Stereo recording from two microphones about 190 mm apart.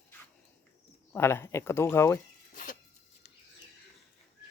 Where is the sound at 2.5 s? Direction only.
45° left (ahead or behind).